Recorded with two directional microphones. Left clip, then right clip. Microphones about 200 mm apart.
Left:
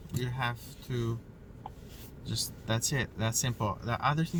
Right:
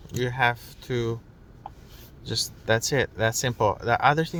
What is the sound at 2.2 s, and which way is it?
Speech, 45° right (ahead or behind).